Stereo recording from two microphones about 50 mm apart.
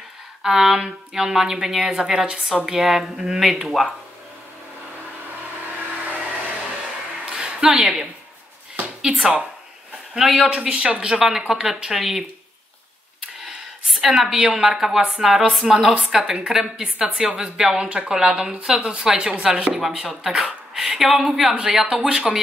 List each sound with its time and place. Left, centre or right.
0.4 s a woman's voice: centre
7.2 s a sound: centre
9.0 s speech: centre
10.1 s speech: centre
10.4 s speech: centre
11.2 s a woman's voice: centre
13.8 s a woman's voice: centre